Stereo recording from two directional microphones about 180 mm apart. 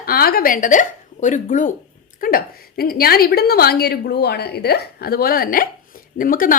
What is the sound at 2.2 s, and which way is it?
A woman's voice, 55° left (ahead or behind).